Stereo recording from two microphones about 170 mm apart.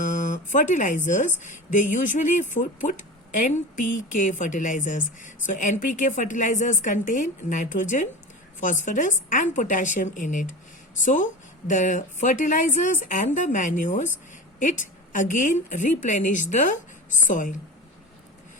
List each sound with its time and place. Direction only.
0.0 s a woman's voice: 45° left (ahead or behind)